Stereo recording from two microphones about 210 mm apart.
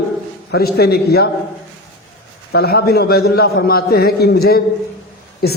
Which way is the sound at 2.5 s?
50° left (ahead or behind).